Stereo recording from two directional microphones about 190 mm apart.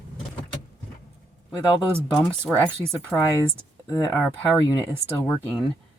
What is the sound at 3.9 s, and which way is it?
Speech, 15° left (ahead or behind).